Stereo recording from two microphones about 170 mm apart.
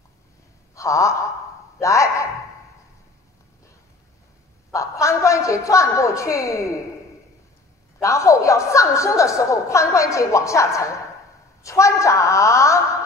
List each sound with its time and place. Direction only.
0.7 s a woman's voice: 20° left (ahead or behind)
4.7 s a man's voice: 20° left (ahead or behind)
8.0 s a woman's voice: 20° left (ahead or behind)